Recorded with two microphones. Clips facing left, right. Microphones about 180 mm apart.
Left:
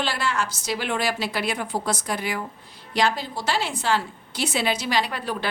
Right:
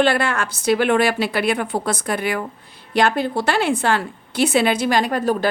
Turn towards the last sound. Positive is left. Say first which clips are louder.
# right 7 dB
turn(degrees=-45)  # may be behind; listen again after turning